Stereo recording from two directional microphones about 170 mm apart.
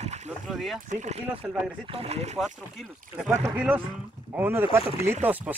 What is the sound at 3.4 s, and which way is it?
A man's voice, 10° right (ahead or behind).